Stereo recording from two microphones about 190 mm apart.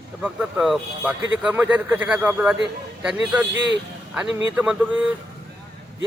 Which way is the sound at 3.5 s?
70° right (ahead or behind).